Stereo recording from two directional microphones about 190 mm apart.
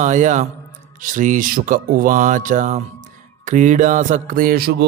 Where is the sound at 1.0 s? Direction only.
45° right (ahead or behind).